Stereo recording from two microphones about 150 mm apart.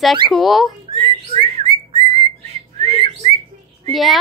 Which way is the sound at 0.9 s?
35° right (ahead or behind).